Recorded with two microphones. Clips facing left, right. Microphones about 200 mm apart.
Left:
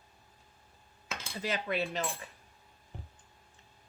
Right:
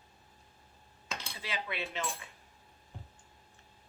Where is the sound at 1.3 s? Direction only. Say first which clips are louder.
Left 7 dB; 45° left (ahead or behind).